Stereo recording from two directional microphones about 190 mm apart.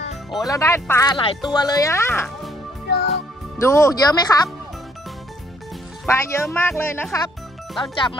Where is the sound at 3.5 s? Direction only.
15° left (ahead or behind).